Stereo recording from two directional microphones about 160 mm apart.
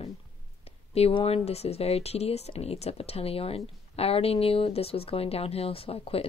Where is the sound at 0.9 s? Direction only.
40° left (ahead or behind).